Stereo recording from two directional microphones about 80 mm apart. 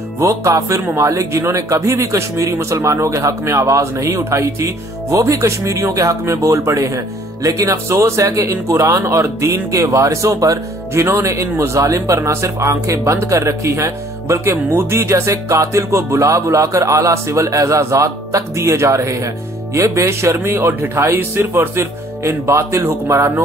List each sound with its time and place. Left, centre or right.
0.2 s speech: right
11.1 s speech: right